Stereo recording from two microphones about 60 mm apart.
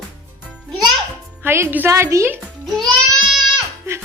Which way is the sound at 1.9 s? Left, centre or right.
Right.